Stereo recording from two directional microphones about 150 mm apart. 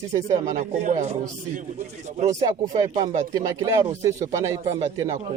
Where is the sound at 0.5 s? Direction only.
55° right (ahead or behind).